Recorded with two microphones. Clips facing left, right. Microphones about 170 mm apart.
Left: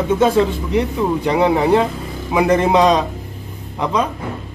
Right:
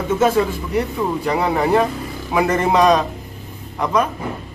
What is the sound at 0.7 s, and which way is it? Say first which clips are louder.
A man's voice: left 1 dB; 20° left (ahead or behind).